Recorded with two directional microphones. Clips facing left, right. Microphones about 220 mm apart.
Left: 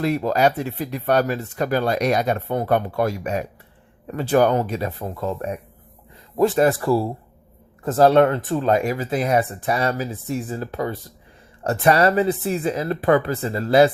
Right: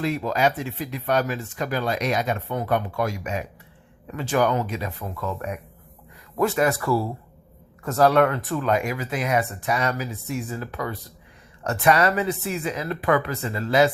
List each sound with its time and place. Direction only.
0.0 s speech: 40° left (ahead or behind)
6.6 s speech: 30° left (ahead or behind)